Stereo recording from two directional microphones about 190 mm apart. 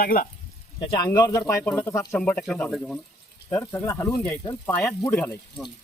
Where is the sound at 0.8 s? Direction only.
25° left (ahead or behind); by 3.0 s centre (ahead or behind).